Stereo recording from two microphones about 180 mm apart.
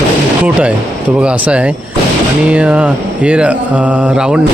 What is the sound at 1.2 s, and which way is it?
Mantra, 5° right (ahead or behind).